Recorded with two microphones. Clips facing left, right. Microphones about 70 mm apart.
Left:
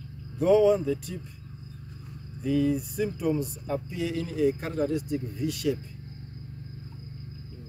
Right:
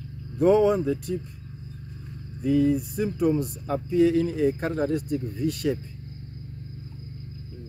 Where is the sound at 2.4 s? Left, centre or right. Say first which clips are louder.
Right 4 dB; right.